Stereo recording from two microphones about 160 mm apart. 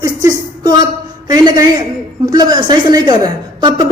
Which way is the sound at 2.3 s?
25° right (ahead or behind).